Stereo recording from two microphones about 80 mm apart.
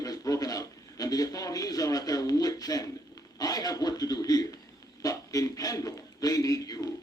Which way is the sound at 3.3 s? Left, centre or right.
Left.